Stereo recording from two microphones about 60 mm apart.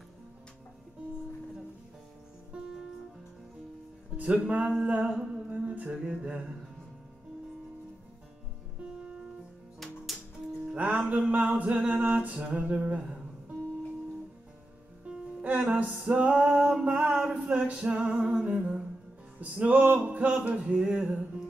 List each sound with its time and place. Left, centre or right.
2.5 s music: centre
4.2 s music: right
10.7 s music: right
15.0 s music: right